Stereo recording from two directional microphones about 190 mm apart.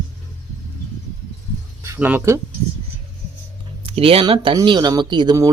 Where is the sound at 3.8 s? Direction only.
30° right (ahead or behind).